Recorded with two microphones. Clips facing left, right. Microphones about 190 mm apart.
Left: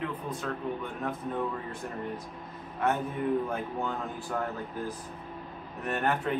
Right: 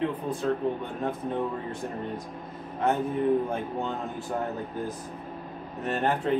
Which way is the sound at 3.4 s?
25° right (ahead or behind).